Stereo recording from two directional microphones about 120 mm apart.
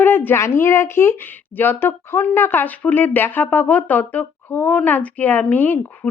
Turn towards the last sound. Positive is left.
turn(degrees=15)  # may be behind; listen again after turning